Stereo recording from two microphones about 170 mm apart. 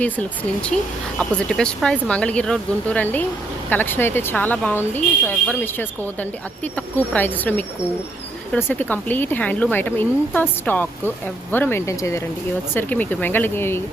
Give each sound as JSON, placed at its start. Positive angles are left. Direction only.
{"t": 0.0, "sound": "speech", "side_deg": 5}
{"t": 6.7, "sound": "speech", "side_deg": 10}